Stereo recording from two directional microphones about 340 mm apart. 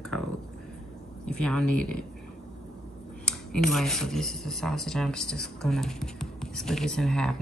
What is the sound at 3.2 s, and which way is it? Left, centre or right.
Speech, centre.